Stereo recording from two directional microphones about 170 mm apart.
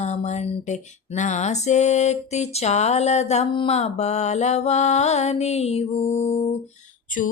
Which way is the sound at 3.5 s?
30° left (ahead or behind).